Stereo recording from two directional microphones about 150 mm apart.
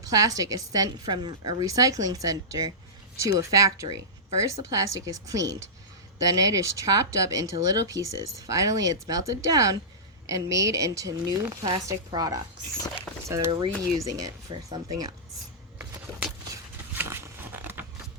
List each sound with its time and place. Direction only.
0.1 s speech: 25° right (ahead or behind)
13.7 s speech: 10° left (ahead or behind)
13.9 s speech: 20° right (ahead or behind)
16.9 s a sound: 15° right (ahead or behind)